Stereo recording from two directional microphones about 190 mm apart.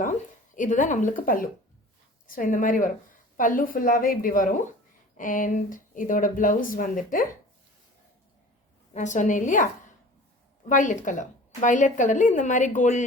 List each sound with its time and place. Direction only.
0.5 s speech: 40° left (ahead or behind)
8.9 s speech: 40° left (ahead or behind)
10.7 s speech: 45° left (ahead or behind)